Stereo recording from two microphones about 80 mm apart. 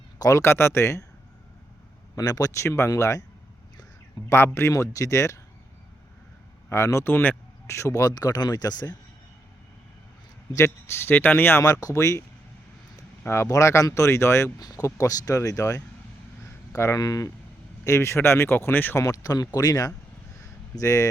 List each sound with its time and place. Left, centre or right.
0.2 s speech: left
2.1 s speech: left
2.6 s speech: left
4.3 s speech: left
6.7 s speech: left
7.0 s a man's voice: left
7.7 s speech: left
10.5 s a man's voice: left
11.6 s speech: left
13.2 s speech: left
14.6 s speech: left
16.4 s a sound: left
17.0 s speech: left
19.0 s speech: left